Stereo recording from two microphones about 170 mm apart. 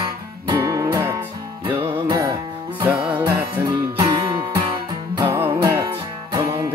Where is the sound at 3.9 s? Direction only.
20° right (ahead or behind).